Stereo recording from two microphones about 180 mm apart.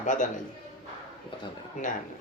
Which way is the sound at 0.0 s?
45° left (ahead or behind).